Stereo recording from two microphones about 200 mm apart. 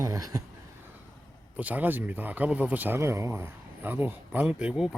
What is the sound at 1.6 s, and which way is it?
Speech, 10° right (ahead or behind).